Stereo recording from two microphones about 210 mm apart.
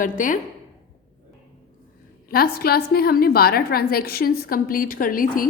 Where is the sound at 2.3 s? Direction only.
45° left (ahead or behind).